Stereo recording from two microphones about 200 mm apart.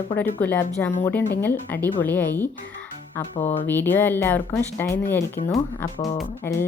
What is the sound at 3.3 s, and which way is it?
Speech, 25° left (ahead or behind).